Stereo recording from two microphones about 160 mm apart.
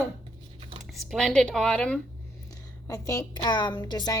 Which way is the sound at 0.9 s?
Centre (ahead or behind).